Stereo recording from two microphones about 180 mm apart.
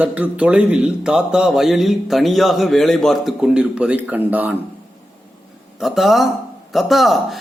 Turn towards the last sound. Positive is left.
turn(degrees=0)  # may be behind; listen again after turning